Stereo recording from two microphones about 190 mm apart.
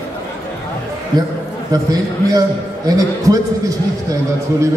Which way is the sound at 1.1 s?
20° right (ahead or behind).